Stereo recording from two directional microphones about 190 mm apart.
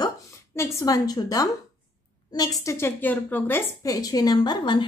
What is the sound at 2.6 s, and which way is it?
A woman's voice, 15° left (ahead or behind).